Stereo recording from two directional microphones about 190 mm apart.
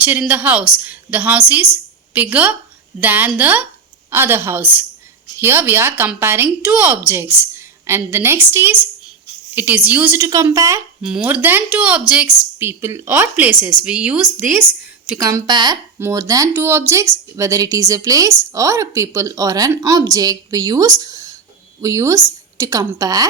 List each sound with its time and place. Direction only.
0.0 s a woman's voice: 10° right (ahead or behind)
10.2 s a woman's voice: 20° right (ahead or behind)
11.0 s speech: 5° right (ahead or behind)
13.6 s speech: 25° left (ahead or behind)
13.8 s speech: 5° right (ahead or behind)
14.6 s a sound: 5° left (ahead or behind)
15.2 s a woman's voice: 15° right (ahead or behind)